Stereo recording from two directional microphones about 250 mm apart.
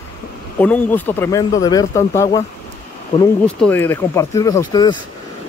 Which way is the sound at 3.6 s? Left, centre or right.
Centre.